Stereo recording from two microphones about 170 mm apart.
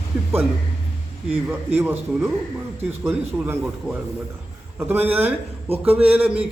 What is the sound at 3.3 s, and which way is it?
A man's voice, 10° right (ahead or behind).